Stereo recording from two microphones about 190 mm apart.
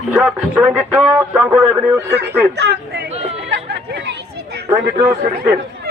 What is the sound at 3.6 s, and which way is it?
Chatter, 60° right (ahead or behind).